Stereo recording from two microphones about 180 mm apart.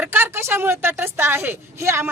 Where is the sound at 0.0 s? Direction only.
10° right (ahead or behind).